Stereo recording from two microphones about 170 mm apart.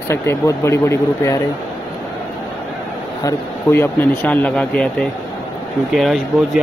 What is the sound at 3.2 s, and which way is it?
Speech, 15° left (ahead or behind).